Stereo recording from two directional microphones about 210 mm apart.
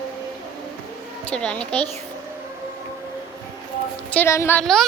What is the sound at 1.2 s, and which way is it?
Speech, 5° left (ahead or behind).